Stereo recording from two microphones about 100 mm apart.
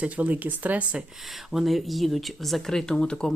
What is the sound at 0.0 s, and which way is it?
Speech, 15° right (ahead or behind).